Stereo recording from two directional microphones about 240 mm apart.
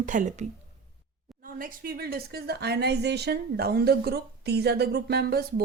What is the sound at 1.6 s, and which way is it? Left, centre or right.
A woman's voice, right.